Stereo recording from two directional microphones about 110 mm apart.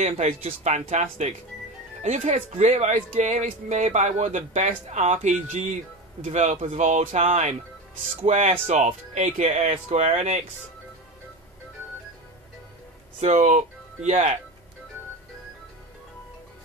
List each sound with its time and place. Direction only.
0.0 s speech: 75° right (ahead or behind)
13.2 s speech: 90° right